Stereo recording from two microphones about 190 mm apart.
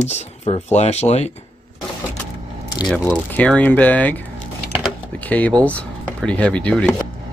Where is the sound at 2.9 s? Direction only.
5° left (ahead or behind).